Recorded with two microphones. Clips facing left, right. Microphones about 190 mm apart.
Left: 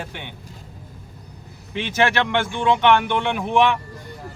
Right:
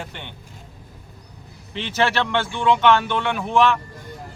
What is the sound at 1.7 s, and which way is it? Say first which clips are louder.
Speech: left 1 dB; 15° left (ahead or behind).